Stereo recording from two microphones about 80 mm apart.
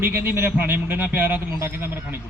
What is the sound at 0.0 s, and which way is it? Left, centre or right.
A man's voice, right.